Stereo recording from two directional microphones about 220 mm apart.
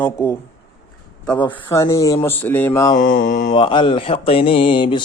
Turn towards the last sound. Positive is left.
turn(degrees=20)  # may be behind; listen again after turning